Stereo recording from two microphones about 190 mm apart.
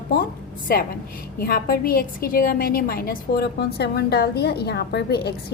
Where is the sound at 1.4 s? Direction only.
50° left (ahead or behind).